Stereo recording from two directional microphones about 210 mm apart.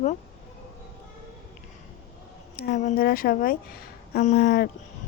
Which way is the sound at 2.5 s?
45° left (ahead or behind).